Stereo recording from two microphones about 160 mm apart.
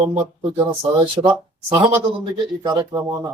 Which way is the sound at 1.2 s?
25° right (ahead or behind).